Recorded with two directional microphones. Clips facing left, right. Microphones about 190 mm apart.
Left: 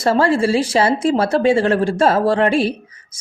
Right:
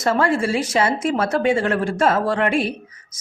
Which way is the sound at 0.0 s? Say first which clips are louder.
Left 4 dB; 30° left (ahead or behind).